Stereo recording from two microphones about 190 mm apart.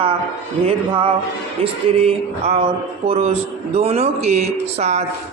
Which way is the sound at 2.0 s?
35° right (ahead or behind).